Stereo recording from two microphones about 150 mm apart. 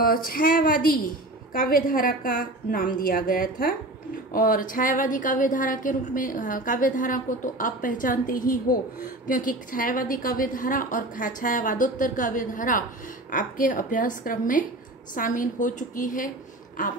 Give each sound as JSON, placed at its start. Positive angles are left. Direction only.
{"t": 0.0, "sound": "a woman's voice", "side_deg": 75}